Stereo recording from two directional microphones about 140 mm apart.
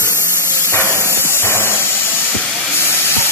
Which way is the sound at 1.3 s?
15° left (ahead or behind).